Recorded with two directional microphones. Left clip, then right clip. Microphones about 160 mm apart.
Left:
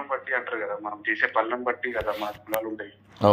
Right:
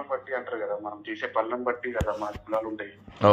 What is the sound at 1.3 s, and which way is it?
Speech, 5° right (ahead or behind).